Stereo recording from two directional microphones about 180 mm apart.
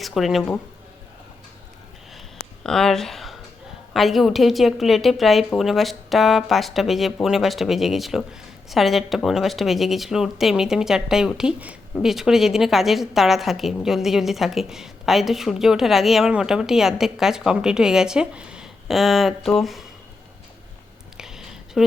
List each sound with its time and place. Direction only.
0.0 s speech: centre (ahead or behind)
2.6 s a woman's voice: 5° left (ahead or behind)
21.2 s a sound: 5° right (ahead or behind)